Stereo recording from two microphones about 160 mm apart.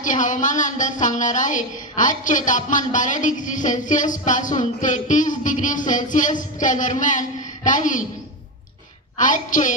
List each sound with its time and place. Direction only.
0.0 s a woman's voice: 50° left (ahead or behind)
9.1 s a woman's voice: 55° left (ahead or behind)